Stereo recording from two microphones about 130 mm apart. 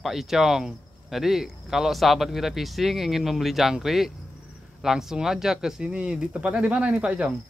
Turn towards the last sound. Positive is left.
turn(degrees=-10)  # may be behind; listen again after turning